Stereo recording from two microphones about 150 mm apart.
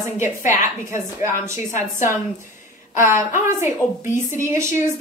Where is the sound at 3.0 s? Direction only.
15° right (ahead or behind).